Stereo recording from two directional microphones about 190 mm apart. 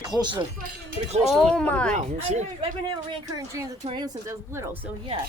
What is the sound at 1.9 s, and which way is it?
Speech, 40° right (ahead or behind).